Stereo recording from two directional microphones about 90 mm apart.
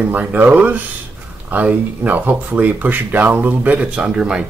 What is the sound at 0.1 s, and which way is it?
Speech, 20° right (ahead or behind).